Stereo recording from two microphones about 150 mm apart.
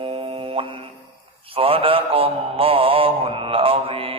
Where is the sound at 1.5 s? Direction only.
40° right (ahead or behind).